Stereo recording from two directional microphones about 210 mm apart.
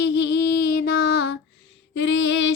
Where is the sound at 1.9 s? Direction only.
60° left (ahead or behind).